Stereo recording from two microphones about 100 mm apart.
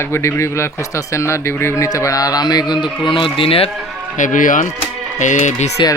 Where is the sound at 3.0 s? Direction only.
55° left (ahead or behind).